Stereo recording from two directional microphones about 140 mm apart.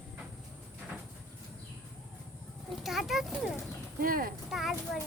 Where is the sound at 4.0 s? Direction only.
90° right.